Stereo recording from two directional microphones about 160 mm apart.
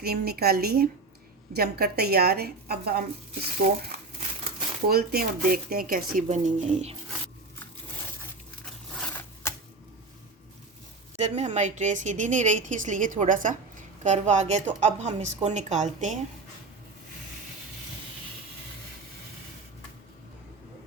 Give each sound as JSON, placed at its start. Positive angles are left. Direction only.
{"t": 0.0, "sound": "speech", "side_deg": -80}
{"t": 4.9, "sound": "speech", "side_deg": -70}
{"t": 11.2, "sound": "a woman's voice", "side_deg": -45}